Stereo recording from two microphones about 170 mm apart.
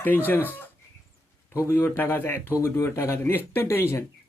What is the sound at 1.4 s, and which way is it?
Chicken, 15° left (ahead or behind).